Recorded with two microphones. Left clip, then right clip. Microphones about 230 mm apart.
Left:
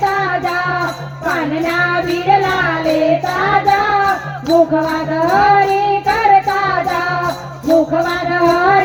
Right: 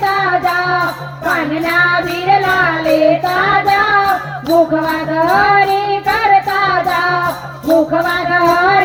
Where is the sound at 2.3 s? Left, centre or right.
Right.